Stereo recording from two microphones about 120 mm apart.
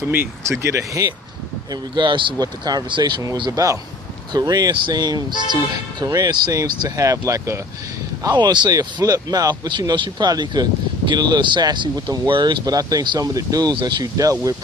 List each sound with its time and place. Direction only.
0.1 s speech: 15° right (ahead or behind)
1.7 s speech: 40° right (ahead or behind)